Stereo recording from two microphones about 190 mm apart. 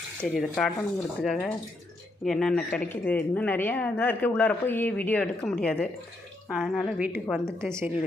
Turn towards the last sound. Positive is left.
turn(degrees=-15)  # may be behind; listen again after turning